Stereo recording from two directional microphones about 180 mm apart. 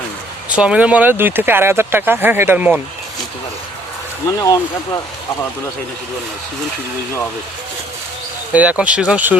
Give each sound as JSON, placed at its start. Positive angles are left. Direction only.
{"t": 0.5, "sound": "speech", "side_deg": -5}
{"t": 4.3, "sound": "speech", "side_deg": 20}
{"t": 8.5, "sound": "speech", "side_deg": -5}